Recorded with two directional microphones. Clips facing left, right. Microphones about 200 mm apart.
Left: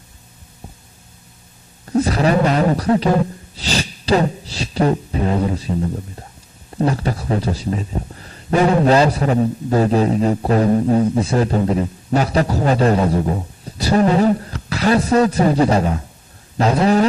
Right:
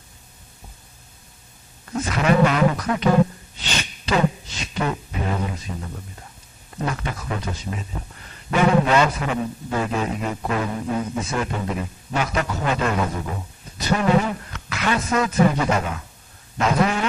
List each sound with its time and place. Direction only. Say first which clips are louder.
1.9 s a man's voice: left 4 dB; 35° left (ahead or behind)
3.5 s a sound: left 7 dB; 35° left (ahead or behind)
6.7 s a man's voice: left 8 dB; 35° left (ahead or behind)